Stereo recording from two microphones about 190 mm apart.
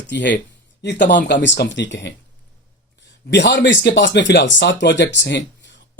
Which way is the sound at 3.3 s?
65° left (ahead or behind).